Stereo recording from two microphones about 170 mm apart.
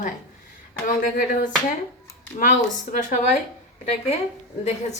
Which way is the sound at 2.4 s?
50° left (ahead or behind).